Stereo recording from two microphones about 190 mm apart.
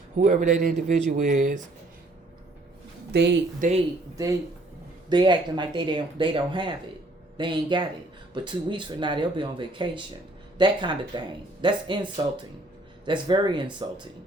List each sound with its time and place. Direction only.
0.2 s speech: 40° right (ahead or behind)
3.1 s speech: 65° right (ahead or behind)
3.6 s speech: 45° right (ahead or behind)
5.0 s speech: 25° right (ahead or behind)